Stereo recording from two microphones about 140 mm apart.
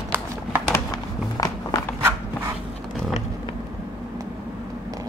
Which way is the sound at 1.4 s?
25° left (ahead or behind).